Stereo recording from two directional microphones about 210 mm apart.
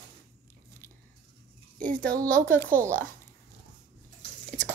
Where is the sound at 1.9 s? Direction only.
40° right (ahead or behind).